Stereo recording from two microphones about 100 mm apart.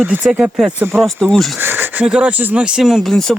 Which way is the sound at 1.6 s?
20° right (ahead or behind).